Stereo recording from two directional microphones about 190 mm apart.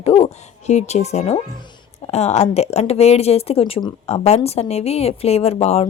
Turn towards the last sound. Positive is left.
turn(degrees=30)  # may be behind; listen again after turning